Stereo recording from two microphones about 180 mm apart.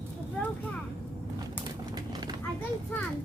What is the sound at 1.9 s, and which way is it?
Horse, 20° right (ahead or behind).